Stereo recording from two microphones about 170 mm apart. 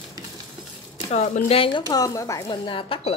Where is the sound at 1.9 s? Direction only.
20° left (ahead or behind).